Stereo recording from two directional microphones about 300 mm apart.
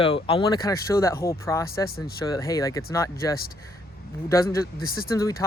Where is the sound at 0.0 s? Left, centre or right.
Centre.